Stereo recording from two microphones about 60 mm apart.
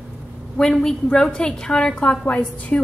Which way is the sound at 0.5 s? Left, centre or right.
Centre.